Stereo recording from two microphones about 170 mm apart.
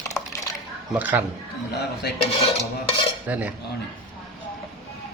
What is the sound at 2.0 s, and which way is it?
Dishes, 70° left (ahead or behind).